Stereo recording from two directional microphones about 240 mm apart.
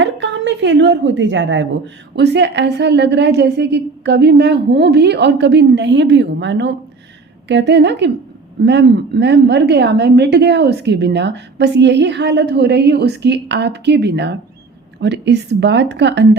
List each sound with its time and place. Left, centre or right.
0.0 s a woman's voice: right